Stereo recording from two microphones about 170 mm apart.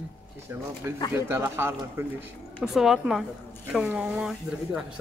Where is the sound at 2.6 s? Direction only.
Centre (ahead or behind).